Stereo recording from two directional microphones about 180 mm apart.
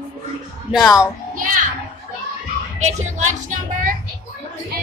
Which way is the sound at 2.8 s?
40° right (ahead or behind).